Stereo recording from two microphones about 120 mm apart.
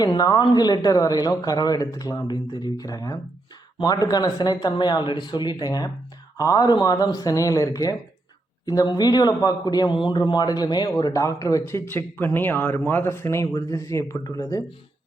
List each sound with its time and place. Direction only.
0.0 s a man's voice: 30° left (ahead or behind)